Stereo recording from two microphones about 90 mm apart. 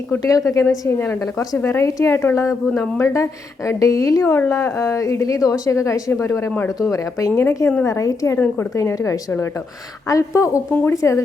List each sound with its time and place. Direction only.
0.2 s speech: 40° left (ahead or behind)
0.7 s a woman's voice: 25° left (ahead or behind)